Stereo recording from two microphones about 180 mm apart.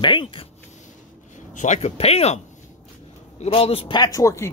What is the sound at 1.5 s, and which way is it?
Speech, 40° left (ahead or behind).